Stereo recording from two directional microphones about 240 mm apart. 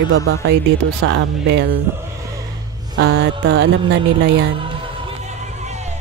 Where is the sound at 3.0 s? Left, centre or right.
Right.